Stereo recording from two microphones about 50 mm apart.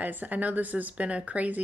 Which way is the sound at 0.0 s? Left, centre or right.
Right.